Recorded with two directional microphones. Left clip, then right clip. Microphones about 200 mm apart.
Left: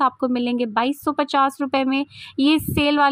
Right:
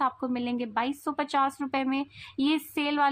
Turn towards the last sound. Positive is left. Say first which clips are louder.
# left 9 dB
turn(degrees=35)  # may be behind; listen again after turning